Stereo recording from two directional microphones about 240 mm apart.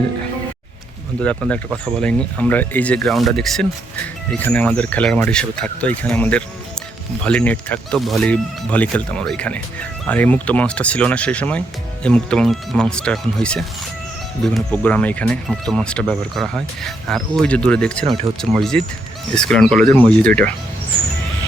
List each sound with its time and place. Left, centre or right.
1.2 s speech: centre
18.0 s speech: right
18.5 s speech: centre